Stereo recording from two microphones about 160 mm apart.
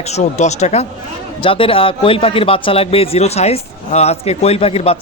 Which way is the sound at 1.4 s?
35° left (ahead or behind).